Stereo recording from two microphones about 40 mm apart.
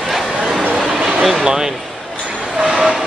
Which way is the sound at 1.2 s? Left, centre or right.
Centre.